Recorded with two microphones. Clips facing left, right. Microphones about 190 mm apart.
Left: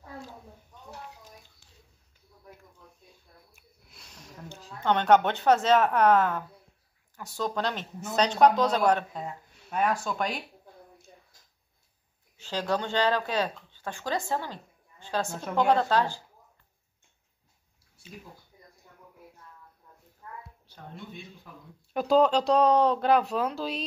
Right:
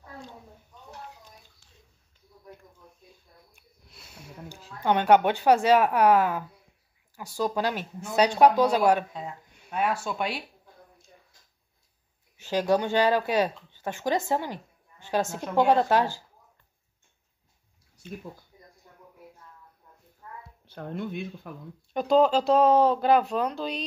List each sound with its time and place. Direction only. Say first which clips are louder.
3.5 s snort: right 2 dB; centre (ahead or behind)
4.7 s speech: right 1 dB; 10° right (ahead or behind)
12.4 s speech: right 5 dB; 15° right (ahead or behind)
20.6 s speech: right 14 dB; 55° right (ahead or behind)
21.9 s speech: right 1 dB; centre (ahead or behind)